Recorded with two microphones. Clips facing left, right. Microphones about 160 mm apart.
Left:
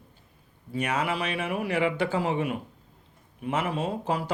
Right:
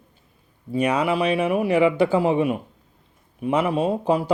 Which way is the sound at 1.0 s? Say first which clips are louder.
Right 8 dB; 15° right (ahead or behind).